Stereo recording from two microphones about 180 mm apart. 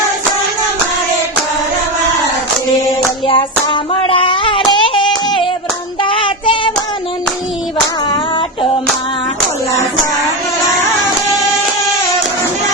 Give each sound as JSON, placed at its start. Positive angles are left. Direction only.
{"t": 3.2, "sound": "hands", "side_deg": 30}
{"t": 6.0, "sound": "child singing", "side_deg": 30}